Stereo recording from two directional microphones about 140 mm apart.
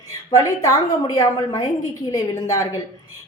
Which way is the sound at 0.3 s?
25° left (ahead or behind).